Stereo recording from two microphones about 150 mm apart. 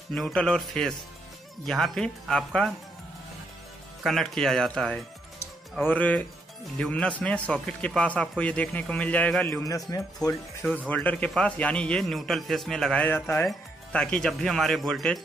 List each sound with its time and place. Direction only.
0.1 s speech: 5° left (ahead or behind)
4.0 s a man's voice: centre (ahead or behind)
10.2 s speech: 25° left (ahead or behind)
10.9 s a man's voice: 10° left (ahead or behind)